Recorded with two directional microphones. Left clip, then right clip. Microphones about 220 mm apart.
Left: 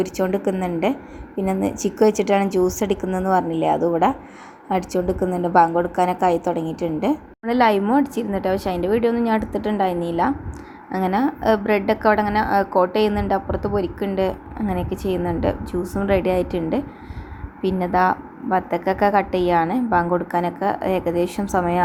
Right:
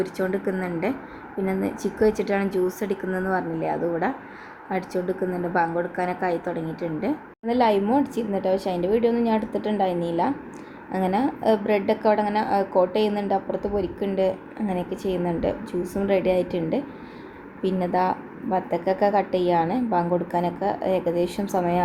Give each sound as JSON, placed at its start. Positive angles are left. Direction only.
{"t": 0.0, "sound": "a woman's voice", "side_deg": 20}